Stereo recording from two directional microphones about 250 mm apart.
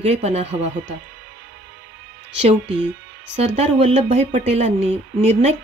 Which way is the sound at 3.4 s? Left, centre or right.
Right.